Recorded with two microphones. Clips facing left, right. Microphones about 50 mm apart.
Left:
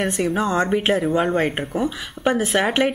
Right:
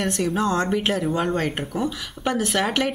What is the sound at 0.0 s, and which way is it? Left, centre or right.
Speech, centre.